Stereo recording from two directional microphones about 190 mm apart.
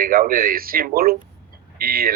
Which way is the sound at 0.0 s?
50° right (ahead or behind).